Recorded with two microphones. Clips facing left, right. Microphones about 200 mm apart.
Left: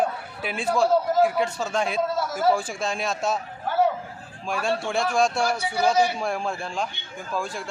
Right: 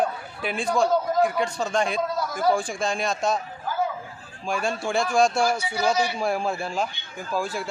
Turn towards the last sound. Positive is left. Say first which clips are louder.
# right 2 dB
turn(degrees=-5)  # may be behind; listen again after turning